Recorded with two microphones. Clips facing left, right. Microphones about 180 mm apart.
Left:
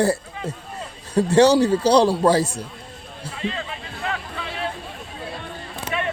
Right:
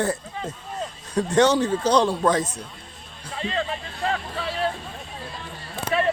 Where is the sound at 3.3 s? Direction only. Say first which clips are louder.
Right 2 dB; 35° right (ahead or behind).